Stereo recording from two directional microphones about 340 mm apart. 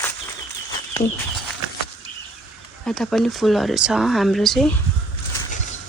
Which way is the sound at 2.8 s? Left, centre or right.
Centre.